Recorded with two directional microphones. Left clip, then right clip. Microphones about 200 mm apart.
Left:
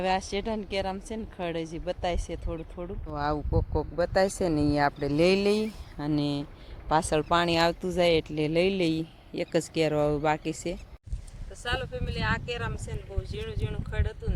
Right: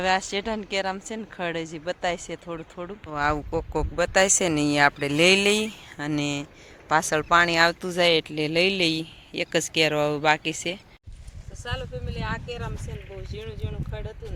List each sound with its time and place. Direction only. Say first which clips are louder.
0.0 s a woman's voice: right 4 dB; 10° right (ahead or behind)
3.9 s speech: right 5 dB; 5° right (ahead or behind)